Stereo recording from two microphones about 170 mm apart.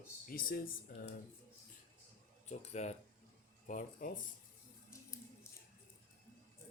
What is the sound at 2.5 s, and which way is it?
Speech, 40° left (ahead or behind).